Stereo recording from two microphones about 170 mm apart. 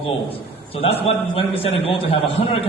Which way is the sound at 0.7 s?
35° left (ahead or behind).